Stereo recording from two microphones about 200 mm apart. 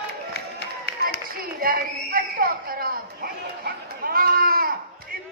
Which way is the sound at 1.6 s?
45° right (ahead or behind).